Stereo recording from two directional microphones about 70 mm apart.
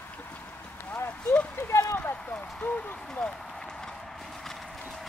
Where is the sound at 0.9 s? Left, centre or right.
Left.